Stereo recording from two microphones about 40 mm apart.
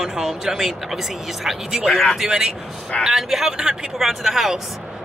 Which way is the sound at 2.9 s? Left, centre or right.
Centre.